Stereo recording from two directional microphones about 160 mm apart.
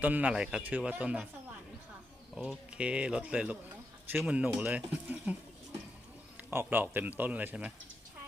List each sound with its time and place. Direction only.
0.0 s speech: 10° right (ahead or behind)
2.3 s speech: 5° right (ahead or behind)
6.5 s speech: 15° right (ahead or behind)